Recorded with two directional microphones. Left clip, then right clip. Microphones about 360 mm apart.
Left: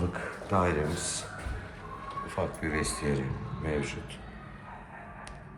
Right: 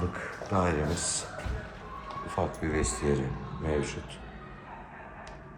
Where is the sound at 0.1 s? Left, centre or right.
Centre.